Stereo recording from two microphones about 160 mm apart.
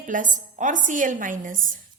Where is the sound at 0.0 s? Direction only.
55° right (ahead or behind).